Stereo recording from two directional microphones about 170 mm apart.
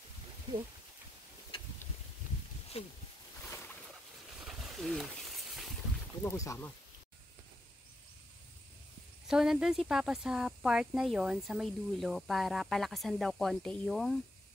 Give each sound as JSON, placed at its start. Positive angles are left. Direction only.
{"t": 2.8, "sound": "speech", "side_deg": 35}
{"t": 3.4, "sound": "boat", "side_deg": 10}
{"t": 4.5, "sound": "wild animals", "side_deg": 0}
{"t": 6.2, "sound": "speech", "side_deg": 20}
{"t": 9.3, "sound": "speech", "side_deg": -5}